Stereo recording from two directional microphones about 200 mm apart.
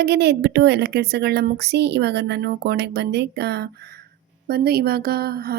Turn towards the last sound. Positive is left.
turn(degrees=-50)  # may be behind; listen again after turning